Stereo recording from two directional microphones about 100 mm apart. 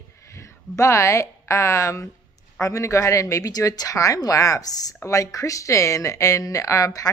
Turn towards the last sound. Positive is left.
turn(degrees=30)  # may be behind; listen again after turning